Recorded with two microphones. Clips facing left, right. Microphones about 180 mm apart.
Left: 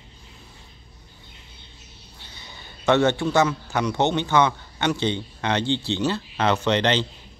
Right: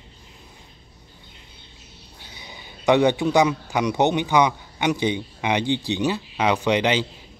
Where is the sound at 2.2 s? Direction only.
10° right (ahead or behind).